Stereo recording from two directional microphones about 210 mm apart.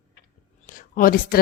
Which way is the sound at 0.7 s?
40° left (ahead or behind).